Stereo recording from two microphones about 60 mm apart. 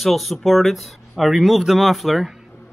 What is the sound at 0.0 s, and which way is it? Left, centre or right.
Speech, centre.